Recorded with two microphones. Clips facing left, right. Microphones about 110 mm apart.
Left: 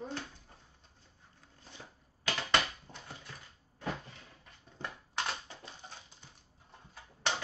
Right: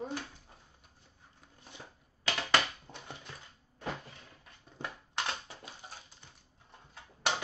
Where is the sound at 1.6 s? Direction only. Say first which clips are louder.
Right 1 dB; 15° right (ahead or behind).